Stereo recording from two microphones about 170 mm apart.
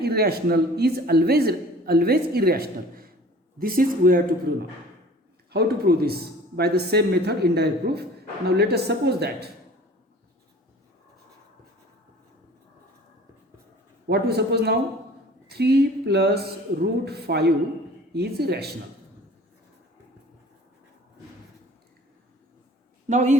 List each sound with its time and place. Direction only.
0.0 s a man's voice: 70° right (ahead or behind)
5.5 s a man's voice: 65° right (ahead or behind)
14.1 s a man's voice: 70° right (ahead or behind)
23.0 s a man's voice: 45° right (ahead or behind)